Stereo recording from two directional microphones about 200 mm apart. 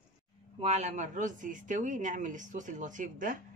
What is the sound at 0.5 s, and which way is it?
Speech, 30° right (ahead or behind).